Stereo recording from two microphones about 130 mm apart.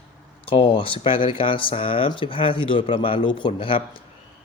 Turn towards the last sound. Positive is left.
turn(degrees=40)  # may be behind; listen again after turning